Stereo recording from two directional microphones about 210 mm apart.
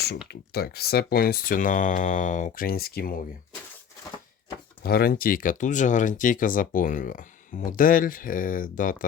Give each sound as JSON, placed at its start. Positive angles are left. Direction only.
{"t": 0.3, "sound": "speech", "side_deg": 50}
{"t": 4.8, "sound": "speech", "side_deg": 45}